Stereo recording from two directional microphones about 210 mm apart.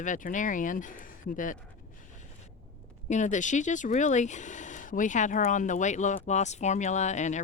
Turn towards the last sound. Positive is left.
turn(degrees=35)  # may be behind; listen again after turning